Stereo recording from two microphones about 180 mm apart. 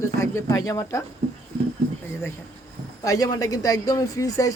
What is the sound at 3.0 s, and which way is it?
A man's voice, 20° left (ahead or behind).